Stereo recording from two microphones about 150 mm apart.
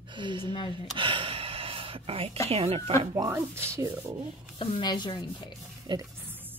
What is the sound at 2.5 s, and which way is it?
Speech, 40° right (ahead or behind).